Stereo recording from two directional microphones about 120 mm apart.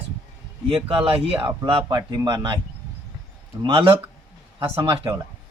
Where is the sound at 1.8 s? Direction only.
35° right (ahead or behind).